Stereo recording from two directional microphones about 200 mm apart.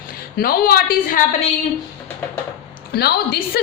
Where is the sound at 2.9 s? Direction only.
50° left (ahead or behind).